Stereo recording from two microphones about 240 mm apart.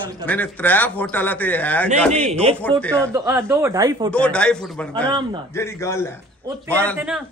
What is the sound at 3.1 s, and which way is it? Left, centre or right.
Speech, centre.